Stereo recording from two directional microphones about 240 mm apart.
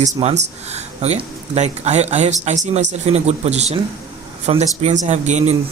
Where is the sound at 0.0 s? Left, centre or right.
Right.